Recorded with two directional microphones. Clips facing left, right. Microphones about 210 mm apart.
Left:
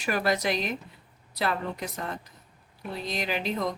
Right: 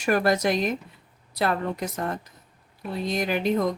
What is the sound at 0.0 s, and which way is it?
A woman's voice, 50° right (ahead or behind).